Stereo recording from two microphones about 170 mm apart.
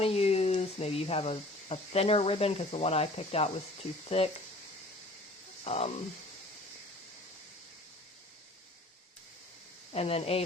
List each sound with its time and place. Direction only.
0.0 s speech: 35° left (ahead or behind)
5.6 s speech: 35° left (ahead or behind)
9.9 s speech: 35° left (ahead or behind)